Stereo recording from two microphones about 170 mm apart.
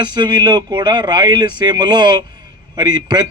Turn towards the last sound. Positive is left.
turn(degrees=-25)  # may be behind; listen again after turning